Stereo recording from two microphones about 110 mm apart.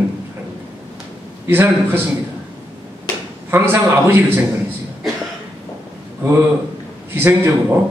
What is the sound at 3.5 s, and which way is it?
Speech, 20° right (ahead or behind).